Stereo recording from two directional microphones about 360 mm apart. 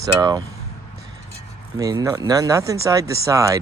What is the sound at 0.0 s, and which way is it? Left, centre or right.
Speech, centre.